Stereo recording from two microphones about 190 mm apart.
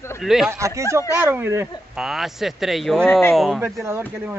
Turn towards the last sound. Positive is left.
turn(degrees=-10)  # may be behind; listen again after turning